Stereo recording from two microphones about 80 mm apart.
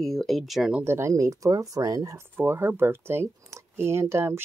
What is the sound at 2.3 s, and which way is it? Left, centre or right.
Speech, right.